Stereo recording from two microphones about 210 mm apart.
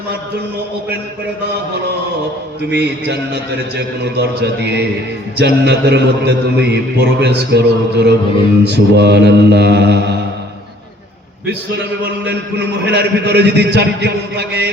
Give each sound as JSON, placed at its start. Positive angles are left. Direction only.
{"t": 2.6, "sound": "a man's voice", "side_deg": -55}
{"t": 12.2, "sound": "a man's voice", "side_deg": -55}